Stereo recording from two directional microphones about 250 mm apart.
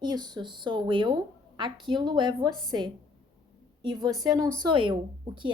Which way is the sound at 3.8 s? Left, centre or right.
Centre.